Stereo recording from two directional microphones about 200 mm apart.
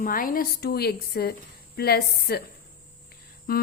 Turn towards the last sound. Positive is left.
turn(degrees=45)  # may be behind; listen again after turning